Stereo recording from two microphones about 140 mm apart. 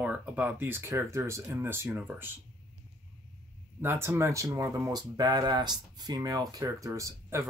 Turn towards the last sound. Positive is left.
turn(degrees=-20)  # may be behind; listen again after turning